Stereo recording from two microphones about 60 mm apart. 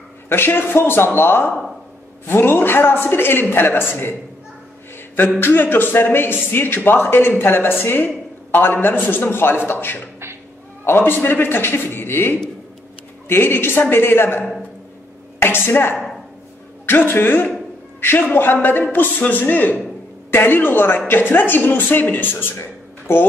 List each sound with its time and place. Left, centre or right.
0.3 s speech: left
5.4 s speech: left
22.6 s a sound: left